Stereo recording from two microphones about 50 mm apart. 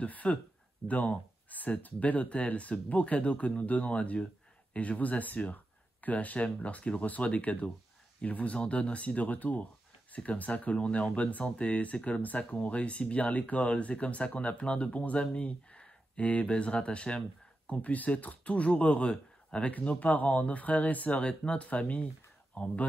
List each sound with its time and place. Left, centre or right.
0.0 s speech: left
21.2 s speech: centre